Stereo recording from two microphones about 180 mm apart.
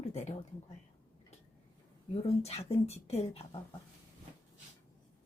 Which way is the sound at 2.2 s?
35° left (ahead or behind).